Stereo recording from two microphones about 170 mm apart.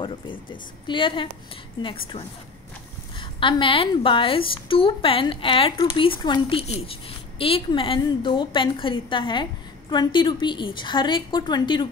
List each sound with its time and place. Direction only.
0.0 s a woman's voice: 30° left (ahead or behind)